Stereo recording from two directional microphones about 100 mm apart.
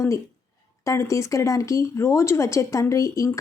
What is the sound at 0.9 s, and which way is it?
A woman's voice, 30° left (ahead or behind).